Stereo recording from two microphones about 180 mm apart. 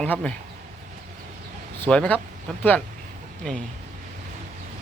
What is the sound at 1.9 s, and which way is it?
Speech, 5° left (ahead or behind).